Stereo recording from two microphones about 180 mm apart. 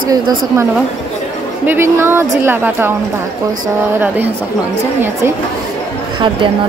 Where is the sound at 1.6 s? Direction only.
15° right (ahead or behind).